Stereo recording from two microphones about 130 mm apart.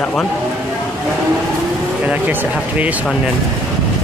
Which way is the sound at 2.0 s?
10° right (ahead or behind).